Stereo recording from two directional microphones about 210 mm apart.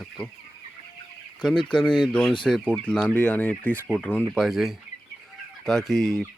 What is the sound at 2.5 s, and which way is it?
Speech, 5° left (ahead or behind).